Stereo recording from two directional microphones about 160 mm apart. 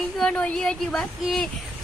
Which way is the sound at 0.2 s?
5° left (ahead or behind).